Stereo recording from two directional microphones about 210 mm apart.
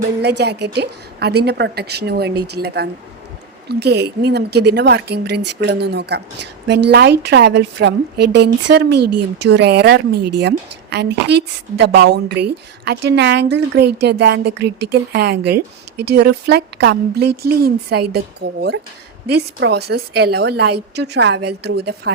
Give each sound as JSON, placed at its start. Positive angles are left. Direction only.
{"t": 0.2, "sound": "a woman's voice", "side_deg": -50}